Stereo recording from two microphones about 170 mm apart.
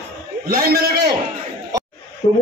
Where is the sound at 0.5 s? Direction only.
65° right (ahead or behind).